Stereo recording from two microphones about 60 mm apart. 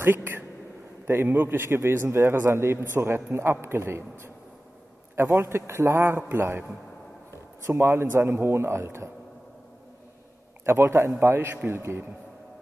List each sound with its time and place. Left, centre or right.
0.0 s a man's voice: right
7.7 s a man's voice: right
10.6 s a man's voice: right